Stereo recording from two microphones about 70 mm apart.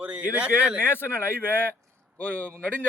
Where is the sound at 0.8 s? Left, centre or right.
Left.